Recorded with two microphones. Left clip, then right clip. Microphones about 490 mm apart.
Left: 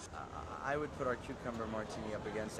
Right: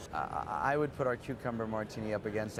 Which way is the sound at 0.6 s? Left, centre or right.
Right.